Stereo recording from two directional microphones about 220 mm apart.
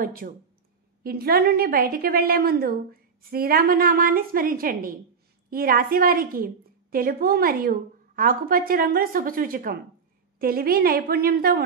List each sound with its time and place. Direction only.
0.0 s a woman's voice: 40° right (ahead or behind)